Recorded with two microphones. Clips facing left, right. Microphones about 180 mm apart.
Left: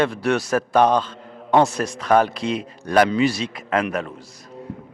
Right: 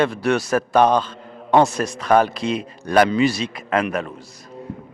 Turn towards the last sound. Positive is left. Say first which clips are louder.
# right 1 dB
turn(degrees=-15)  # may be behind; listen again after turning